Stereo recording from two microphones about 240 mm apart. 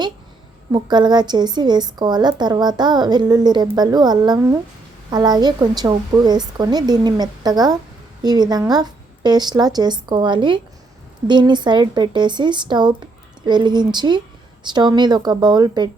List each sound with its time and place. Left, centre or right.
0.7 s a woman's voice: centre